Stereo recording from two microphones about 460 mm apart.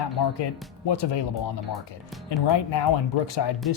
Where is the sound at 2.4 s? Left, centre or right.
Left.